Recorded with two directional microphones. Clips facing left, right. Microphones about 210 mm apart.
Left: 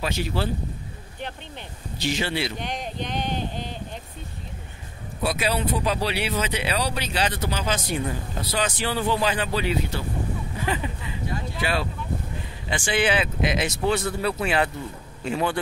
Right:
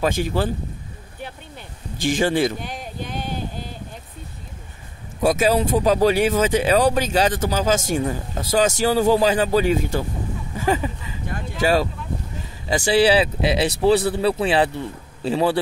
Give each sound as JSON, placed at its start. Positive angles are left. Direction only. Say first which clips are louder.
{"t": 0.0, "sound": "speech", "louder": "right 6 dB", "side_deg": -50}
{"t": 2.0, "sound": "speech", "louder": "right 7 dB", "side_deg": -50}
{"t": 2.6, "sound": "a sound", "louder": "left 1 dB", "side_deg": -5}
{"t": 5.2, "sound": "speech", "louder": "right 7 dB", "side_deg": -45}
{"t": 11.2, "sound": "speech", "louder": "right 7 dB", "side_deg": -45}